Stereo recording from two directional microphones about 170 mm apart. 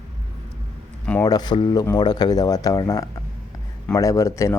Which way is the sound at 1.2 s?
25° left (ahead or behind).